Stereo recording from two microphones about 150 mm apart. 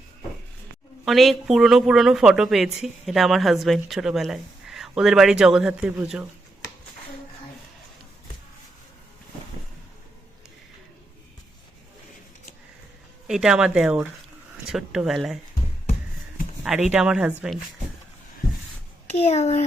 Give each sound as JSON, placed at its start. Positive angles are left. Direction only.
{"t": 1.0, "sound": "speech", "side_deg": 0}
{"t": 13.2, "sound": "speech", "side_deg": -5}
{"t": 16.9, "sound": "speech", "side_deg": -5}
{"t": 19.1, "sound": "a child's voice", "side_deg": 45}